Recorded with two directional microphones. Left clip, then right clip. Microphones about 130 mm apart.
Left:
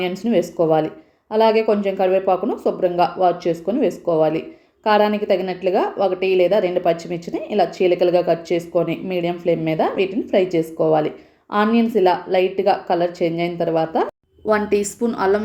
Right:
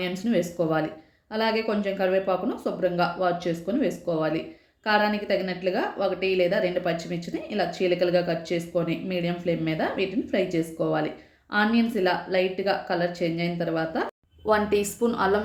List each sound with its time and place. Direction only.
0.0 s a woman's voice: 25° left (ahead or behind)